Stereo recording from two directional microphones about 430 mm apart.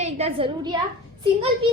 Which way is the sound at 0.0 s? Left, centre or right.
Centre.